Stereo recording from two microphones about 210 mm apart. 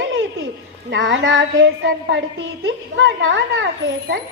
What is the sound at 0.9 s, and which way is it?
A woman's voice, 65° right (ahead or behind).